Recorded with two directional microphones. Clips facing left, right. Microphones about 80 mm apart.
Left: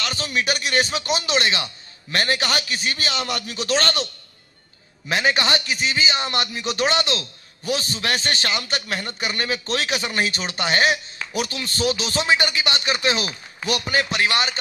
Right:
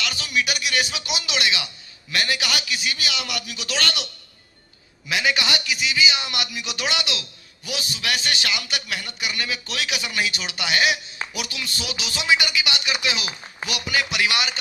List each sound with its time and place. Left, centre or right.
0.0 s a man's voice: left